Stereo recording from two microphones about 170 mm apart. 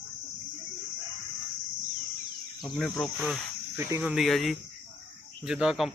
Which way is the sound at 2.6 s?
Centre (ahead or behind).